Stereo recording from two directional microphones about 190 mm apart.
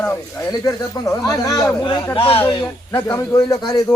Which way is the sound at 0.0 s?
15° left (ahead or behind).